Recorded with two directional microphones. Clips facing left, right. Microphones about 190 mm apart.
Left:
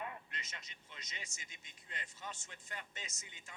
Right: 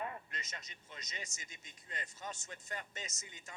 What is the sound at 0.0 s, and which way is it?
A man's voice, 40° right (ahead or behind).